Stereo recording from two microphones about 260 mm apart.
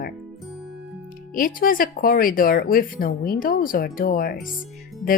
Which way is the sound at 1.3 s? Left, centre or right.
Left.